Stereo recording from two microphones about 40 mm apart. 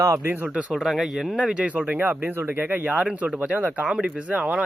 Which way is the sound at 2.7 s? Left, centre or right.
Right.